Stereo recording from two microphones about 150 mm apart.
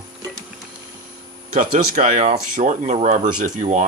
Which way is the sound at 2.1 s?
45° right (ahead or behind).